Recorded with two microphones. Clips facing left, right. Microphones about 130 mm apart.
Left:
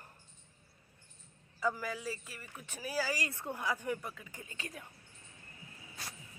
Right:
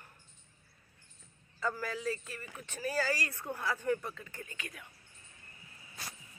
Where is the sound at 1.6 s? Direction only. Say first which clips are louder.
Even; 10° left (ahead or behind).